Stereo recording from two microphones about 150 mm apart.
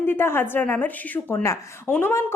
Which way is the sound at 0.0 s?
15° left (ahead or behind).